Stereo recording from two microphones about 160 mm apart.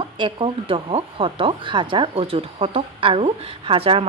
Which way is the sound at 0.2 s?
30° right (ahead or behind).